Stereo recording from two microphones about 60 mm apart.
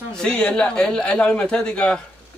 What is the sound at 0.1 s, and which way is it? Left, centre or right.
Speech, centre.